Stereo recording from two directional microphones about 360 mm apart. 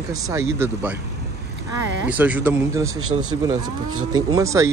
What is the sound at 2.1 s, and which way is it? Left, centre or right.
A man's voice, centre.